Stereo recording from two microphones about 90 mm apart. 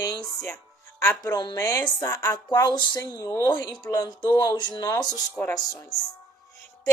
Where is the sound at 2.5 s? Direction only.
55° left (ahead or behind).